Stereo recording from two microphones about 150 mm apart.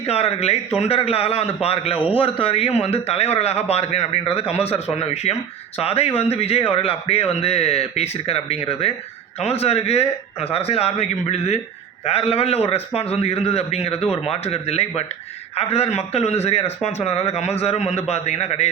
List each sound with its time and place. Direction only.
0.0 s a man's voice: 45° left (ahead or behind)